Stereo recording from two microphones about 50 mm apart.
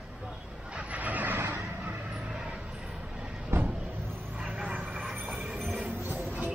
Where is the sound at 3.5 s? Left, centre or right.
Right.